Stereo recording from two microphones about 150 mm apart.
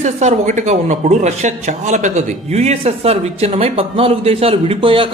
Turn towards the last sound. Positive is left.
turn(degrees=-35)  # may be behind; listen again after turning